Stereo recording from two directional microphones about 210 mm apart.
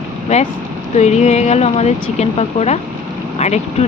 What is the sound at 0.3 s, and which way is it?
Speech, 35° left (ahead or behind).